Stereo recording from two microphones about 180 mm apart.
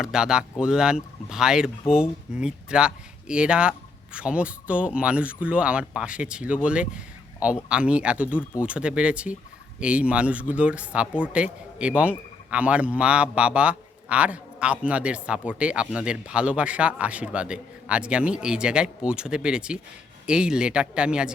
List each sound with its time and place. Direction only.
0.0 s a man's voice: 5° right (ahead or behind)